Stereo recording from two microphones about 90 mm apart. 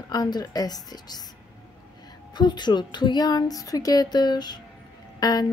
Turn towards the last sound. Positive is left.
turn(degrees=45)  # may be behind; listen again after turning